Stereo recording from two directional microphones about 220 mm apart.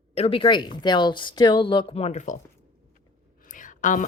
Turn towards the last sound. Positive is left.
turn(degrees=35)  # may be behind; listen again after turning